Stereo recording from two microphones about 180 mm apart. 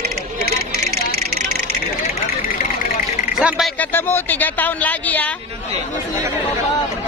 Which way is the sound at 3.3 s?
Centre (ahead or behind).